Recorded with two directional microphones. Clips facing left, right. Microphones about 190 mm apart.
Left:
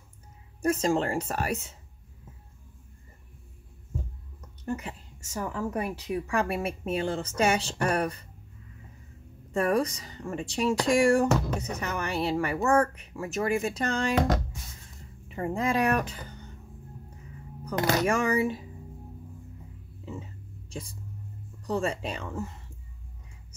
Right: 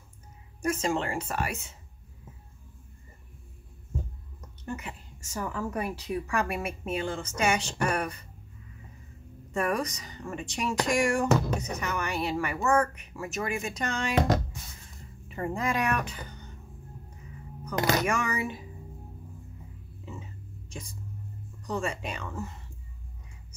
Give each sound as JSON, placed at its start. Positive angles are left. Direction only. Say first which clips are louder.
{"t": 0.6, "sound": "a woman's voice", "louder": "left 3 dB", "side_deg": 35}
{"t": 4.6, "sound": "a sound", "louder": "left 4 dB", "side_deg": 35}
{"t": 5.3, "sound": "a woman's voice", "louder": "left 1 dB", "side_deg": 25}
{"t": 9.5, "sound": "a woman's voice", "louder": "left 4 dB", "side_deg": 30}
{"t": 15.2, "sound": "speech", "louder": "left 2 dB", "side_deg": 20}
{"t": 17.6, "sound": "a woman's voice", "louder": "left 1 dB", "side_deg": 30}
{"t": 21.6, "sound": "a woman's voice", "louder": "left 3 dB", "side_deg": 35}